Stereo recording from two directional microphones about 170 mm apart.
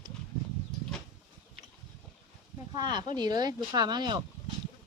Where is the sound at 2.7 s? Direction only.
25° right (ahead or behind).